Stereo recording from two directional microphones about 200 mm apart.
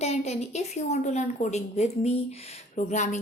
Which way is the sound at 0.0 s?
35° left (ahead or behind).